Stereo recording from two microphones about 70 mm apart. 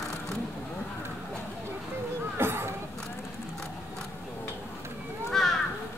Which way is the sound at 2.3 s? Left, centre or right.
Right.